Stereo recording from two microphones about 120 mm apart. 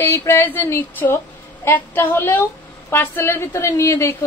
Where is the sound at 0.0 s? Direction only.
25° left (ahead or behind).